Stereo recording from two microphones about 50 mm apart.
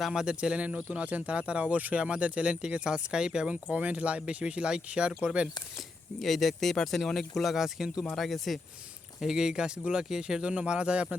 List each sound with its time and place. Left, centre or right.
0.0 s speech: centre
0.3 s speech: right
3.5 s speech: right
6.1 s speech: centre
8.1 s speech: centre
9.2 s speech: centre